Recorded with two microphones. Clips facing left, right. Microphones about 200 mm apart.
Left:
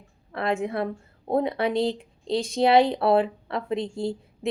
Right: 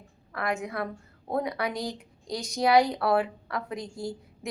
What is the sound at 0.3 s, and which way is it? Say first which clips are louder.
A woman's voice: left 5 dB; 30° left (ahead or behind).